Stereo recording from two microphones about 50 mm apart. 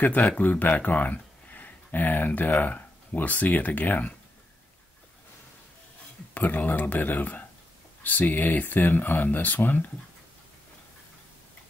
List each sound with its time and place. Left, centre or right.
0.0 s speech: left
6.3 s speech: left